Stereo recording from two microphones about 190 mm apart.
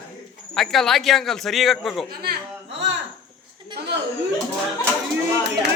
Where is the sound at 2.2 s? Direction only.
55° right (ahead or behind).